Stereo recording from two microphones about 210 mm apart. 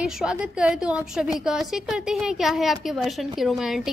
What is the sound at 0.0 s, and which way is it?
A woman's voice, 5° right (ahead or behind).